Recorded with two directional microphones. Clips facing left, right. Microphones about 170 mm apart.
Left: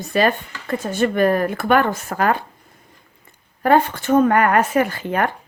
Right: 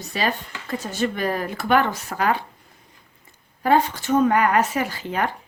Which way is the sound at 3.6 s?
55° left (ahead or behind).